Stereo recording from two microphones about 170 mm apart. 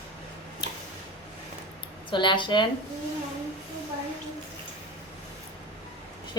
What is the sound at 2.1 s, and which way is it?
Speech, 30° left (ahead or behind).